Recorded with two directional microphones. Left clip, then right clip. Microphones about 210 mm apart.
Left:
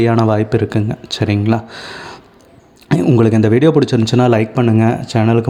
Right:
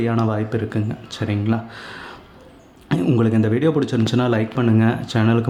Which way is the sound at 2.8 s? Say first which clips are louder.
Left 7 dB; 25° left (ahead or behind).